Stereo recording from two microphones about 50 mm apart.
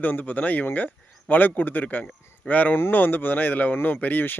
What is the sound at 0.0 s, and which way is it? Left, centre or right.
Speech, left.